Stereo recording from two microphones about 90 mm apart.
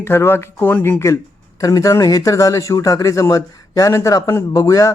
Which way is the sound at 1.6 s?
40° left (ahead or behind).